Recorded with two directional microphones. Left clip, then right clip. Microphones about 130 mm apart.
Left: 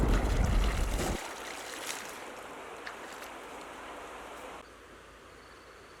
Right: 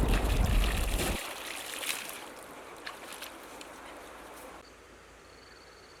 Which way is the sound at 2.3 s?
50° left (ahead or behind).